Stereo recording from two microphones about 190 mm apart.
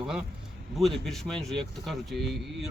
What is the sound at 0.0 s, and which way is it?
A man's voice, 5° right (ahead or behind).